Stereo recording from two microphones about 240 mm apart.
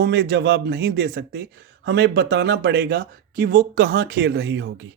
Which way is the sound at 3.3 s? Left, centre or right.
Right.